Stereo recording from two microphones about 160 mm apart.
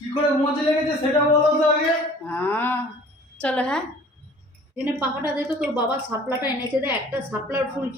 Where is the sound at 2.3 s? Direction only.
10° left (ahead or behind).